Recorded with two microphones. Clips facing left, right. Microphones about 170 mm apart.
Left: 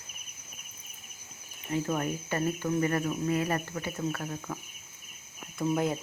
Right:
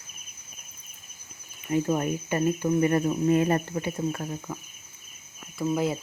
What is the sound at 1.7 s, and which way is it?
Speech, 20° right (ahead or behind).